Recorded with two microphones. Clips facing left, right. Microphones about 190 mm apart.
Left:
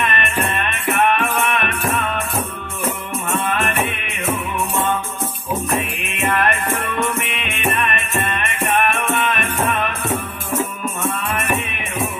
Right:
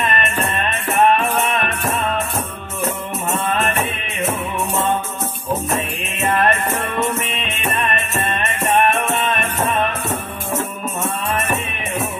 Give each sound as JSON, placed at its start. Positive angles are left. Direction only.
{"t": 0.0, "sound": "music", "side_deg": -25}
{"t": 3.3, "sound": "music", "side_deg": -25}
{"t": 5.8, "sound": "music", "side_deg": -25}
{"t": 11.0, "sound": "music", "side_deg": -25}